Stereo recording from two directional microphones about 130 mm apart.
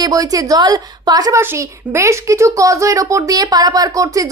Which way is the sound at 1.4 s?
20° right (ahead or behind).